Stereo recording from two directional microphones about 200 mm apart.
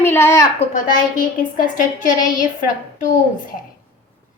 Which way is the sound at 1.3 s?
40° left (ahead or behind).